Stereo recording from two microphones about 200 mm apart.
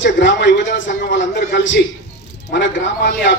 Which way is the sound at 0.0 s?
65° left (ahead or behind).